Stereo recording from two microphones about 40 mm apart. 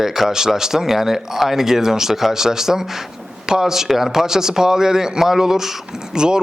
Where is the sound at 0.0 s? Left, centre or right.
Centre.